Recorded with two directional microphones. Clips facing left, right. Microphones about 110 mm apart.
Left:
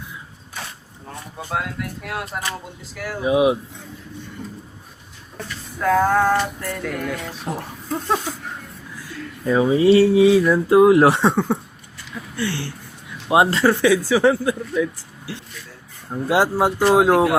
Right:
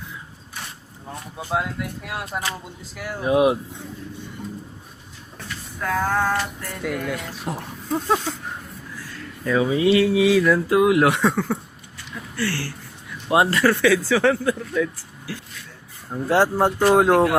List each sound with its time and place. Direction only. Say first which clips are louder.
1.4 s speech: right 1 dB; centre (ahead or behind)
5.8 s speech: left 5 dB; 15° left (ahead or behind)
6.8 s speech: right 2 dB; centre (ahead or behind)
9.4 s speech: left 3 dB; 30° left (ahead or behind)
16.0 s speech: even; 10° left (ahead or behind)